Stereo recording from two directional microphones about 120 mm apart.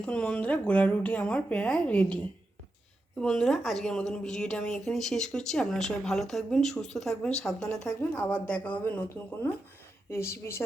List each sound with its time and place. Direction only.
0.0 s a woman's voice: 10° left (ahead or behind)